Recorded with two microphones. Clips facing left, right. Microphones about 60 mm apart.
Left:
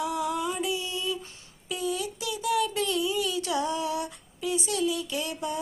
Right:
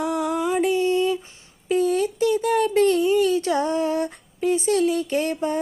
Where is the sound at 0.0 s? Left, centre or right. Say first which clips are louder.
Right 5 dB; right.